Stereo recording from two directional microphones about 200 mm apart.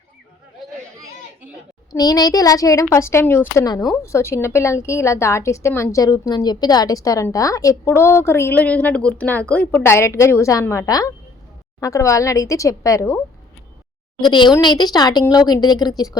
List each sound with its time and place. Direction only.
1.9 s a woman's voice: 20° left (ahead or behind)